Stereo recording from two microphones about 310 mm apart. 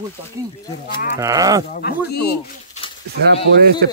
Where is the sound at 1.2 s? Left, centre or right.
Centre.